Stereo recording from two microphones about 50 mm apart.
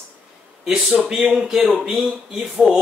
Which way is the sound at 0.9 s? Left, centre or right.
Centre.